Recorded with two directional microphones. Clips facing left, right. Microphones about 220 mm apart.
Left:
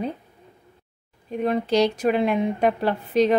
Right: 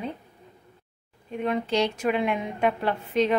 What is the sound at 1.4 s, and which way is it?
A woman's voice, 35° left (ahead or behind).